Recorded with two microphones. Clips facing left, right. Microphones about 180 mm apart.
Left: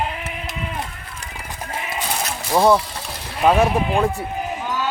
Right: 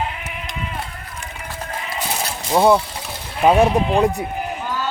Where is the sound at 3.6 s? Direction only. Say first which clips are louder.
Right 2 dB; 15° right (ahead or behind).